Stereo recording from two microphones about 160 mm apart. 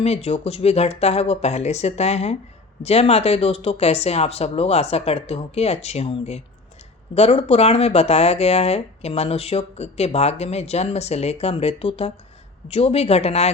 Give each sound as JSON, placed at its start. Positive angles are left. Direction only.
{"t": 0.0, "sound": "speech", "side_deg": 40}